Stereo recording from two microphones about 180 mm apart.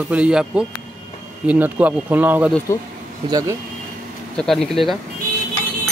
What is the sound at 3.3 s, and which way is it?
Speech, 20° right (ahead or behind).